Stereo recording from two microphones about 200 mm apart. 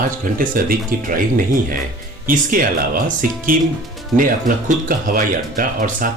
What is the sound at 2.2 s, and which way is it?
Speech, 45° right (ahead or behind).